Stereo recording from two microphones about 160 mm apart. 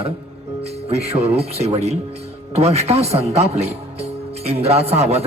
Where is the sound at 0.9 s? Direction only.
40° right (ahead or behind).